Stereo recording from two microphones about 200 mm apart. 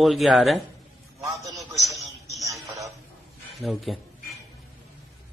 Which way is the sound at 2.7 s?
15° right (ahead or behind).